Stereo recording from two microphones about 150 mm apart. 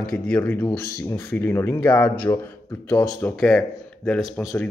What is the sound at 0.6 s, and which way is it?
A man's voice, 25° left (ahead or behind).